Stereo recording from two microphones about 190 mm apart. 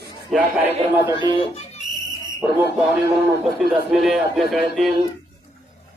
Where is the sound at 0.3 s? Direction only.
5° right (ahead or behind).